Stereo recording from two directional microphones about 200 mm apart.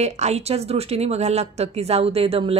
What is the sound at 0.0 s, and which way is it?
A woman's voice, 35° right (ahead or behind).